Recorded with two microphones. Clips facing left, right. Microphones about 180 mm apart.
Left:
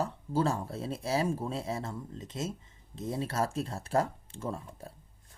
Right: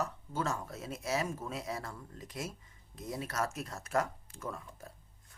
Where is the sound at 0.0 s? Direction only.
30° left (ahead or behind).